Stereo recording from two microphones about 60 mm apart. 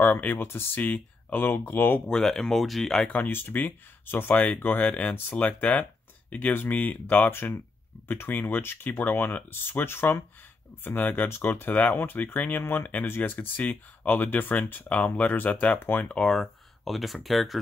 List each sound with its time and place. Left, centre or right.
0.0 s speech: left
0.7 s speech: left
2.0 s speech: centre
3.1 s speech: left
15.8 s speech: left
16.3 s speech: centre